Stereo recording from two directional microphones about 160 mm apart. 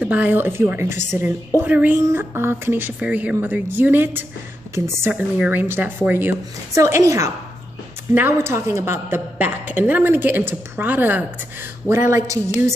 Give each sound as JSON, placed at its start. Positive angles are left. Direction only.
{"t": 0.0, "sound": "a woman's voice", "side_deg": -10}